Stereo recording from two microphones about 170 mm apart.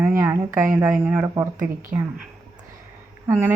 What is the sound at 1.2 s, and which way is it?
Speech, 20° right (ahead or behind).